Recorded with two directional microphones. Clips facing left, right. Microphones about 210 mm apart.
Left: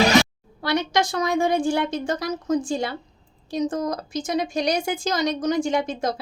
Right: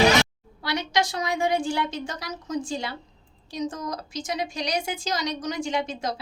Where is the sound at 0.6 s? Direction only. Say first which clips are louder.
Left 4 dB; 50° left (ahead or behind).